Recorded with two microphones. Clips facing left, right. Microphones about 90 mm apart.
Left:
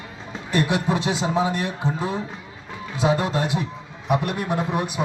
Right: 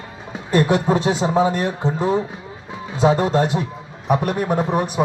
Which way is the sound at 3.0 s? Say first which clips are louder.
Right 5 dB; 45° right (ahead or behind).